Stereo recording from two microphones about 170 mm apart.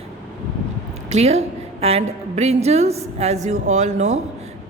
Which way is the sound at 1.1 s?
35° right (ahead or behind).